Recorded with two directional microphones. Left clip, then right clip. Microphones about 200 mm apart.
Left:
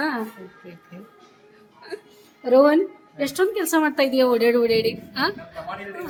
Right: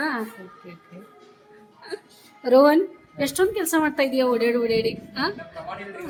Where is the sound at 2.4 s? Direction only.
5° right (ahead or behind).